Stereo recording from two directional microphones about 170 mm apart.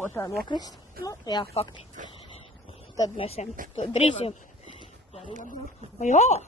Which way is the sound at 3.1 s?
35° left (ahead or behind).